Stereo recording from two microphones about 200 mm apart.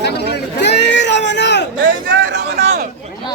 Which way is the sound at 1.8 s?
55° right (ahead or behind).